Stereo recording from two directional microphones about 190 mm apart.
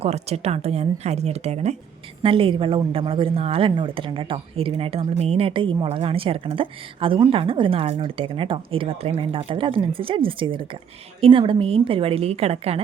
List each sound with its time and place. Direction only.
0.0 s a woman's voice: 35° right (ahead or behind)